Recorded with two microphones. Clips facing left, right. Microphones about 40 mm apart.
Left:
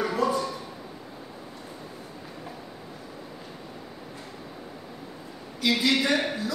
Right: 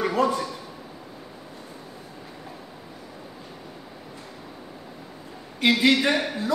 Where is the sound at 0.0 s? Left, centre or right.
Right.